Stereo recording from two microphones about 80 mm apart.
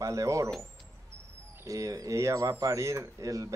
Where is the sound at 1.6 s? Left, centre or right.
Right.